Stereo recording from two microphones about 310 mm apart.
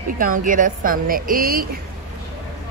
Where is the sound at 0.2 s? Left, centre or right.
Right.